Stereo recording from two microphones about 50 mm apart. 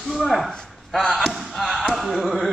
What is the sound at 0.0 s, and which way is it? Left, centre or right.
Speech, centre.